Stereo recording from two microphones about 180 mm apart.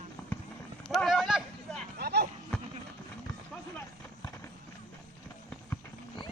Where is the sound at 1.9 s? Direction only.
65° right (ahead or behind).